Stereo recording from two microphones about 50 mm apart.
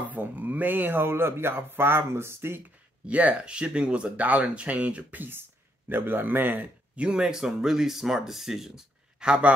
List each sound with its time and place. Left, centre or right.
0.0 s a man's voice: right
3.1 s a man's voice: right
7.1 s speech: centre
9.2 s speech: centre